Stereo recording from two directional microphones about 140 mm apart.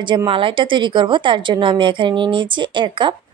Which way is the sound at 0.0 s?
35° right (ahead or behind).